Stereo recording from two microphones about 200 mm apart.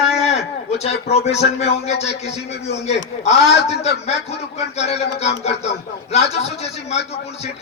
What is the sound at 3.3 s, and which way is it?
Speech, 30° left (ahead or behind).